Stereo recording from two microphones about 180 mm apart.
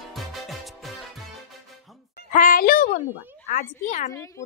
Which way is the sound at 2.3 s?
50° left (ahead or behind).